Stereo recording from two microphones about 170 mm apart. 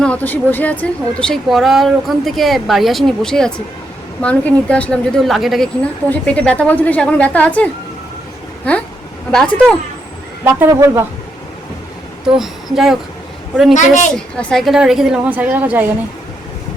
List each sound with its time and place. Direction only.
0.0 s a woman's voice: 10° left (ahead or behind)
9.3 s speech: 5° left (ahead or behind)
10.4 s speech: 15° right (ahead or behind)
12.2 s speech: centre (ahead or behind)
13.7 s a woman's voice: 50° left (ahead or behind)
14.3 s speech: centre (ahead or behind)